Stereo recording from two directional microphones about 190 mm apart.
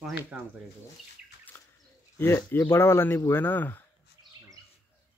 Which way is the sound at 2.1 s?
10° left (ahead or behind).